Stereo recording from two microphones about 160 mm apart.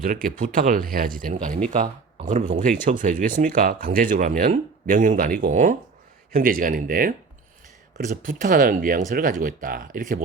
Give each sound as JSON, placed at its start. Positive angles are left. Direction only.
{"t": 0.0, "sound": "speech", "side_deg": -60}